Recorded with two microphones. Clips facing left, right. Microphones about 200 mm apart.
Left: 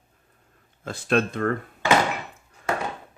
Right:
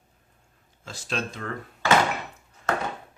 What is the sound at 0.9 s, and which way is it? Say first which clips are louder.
Speech: left 9 dB; 55° left (ahead or behind).